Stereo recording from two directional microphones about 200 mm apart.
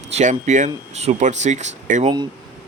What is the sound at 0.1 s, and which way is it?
Speech, 35° right (ahead or behind).